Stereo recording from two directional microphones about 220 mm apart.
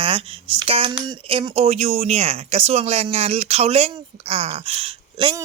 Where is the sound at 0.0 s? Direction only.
25° right (ahead or behind).